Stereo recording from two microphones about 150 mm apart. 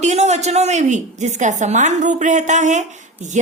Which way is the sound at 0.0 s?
50° right (ahead or behind).